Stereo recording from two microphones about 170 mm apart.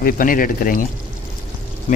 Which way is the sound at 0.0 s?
55° left (ahead or behind).